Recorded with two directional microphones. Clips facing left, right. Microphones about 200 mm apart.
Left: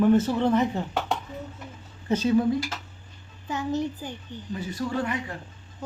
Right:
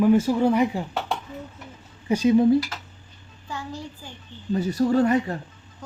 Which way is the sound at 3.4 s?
20° left (ahead or behind).